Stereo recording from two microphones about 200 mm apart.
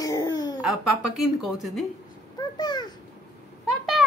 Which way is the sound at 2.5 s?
20° left (ahead or behind).